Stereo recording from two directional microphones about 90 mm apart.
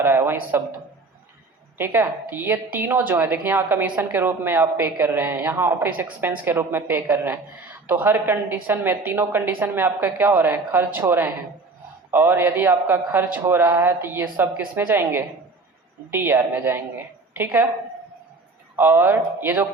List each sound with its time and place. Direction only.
0.0 s a man's voice: 25° right (ahead or behind)
1.8 s a woman's voice: 25° right (ahead or behind)
18.8 s a woman's voice: 25° right (ahead or behind)